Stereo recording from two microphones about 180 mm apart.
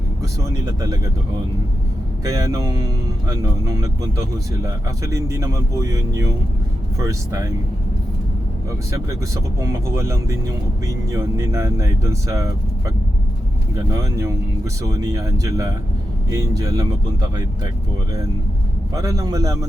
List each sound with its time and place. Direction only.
0.6 s speech: 20° right (ahead or behind)
2.2 s speech: 20° right (ahead or behind)
8.9 s speech: 15° right (ahead or behind)
13.9 s speech: 15° right (ahead or behind)
18.9 s speech: 20° right (ahead or behind)